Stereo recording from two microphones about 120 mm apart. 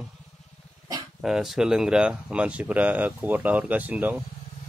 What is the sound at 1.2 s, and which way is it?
Speech, 5° right (ahead or behind).